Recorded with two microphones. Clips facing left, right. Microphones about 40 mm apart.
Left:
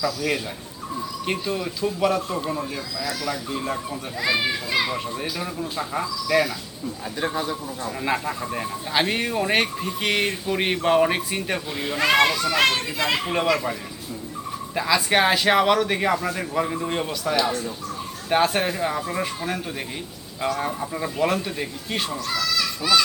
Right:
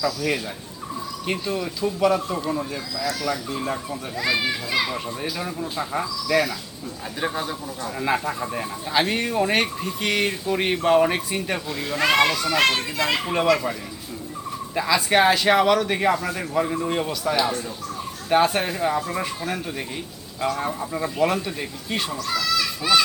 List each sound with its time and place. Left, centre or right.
0.0 s speech: centre
11.7 s speech: centre
11.9 s speech: centre
14.8 s speech: centre
22.5 s a child's voice: centre